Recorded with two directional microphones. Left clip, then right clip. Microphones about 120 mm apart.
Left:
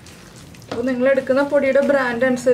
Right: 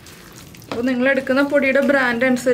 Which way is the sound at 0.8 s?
15° right (ahead or behind).